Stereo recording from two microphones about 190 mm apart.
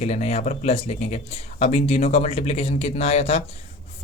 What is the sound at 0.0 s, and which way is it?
Speech, 35° left (ahead or behind).